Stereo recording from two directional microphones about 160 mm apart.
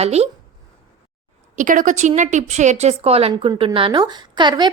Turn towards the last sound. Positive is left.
turn(degrees=-30)  # may be behind; listen again after turning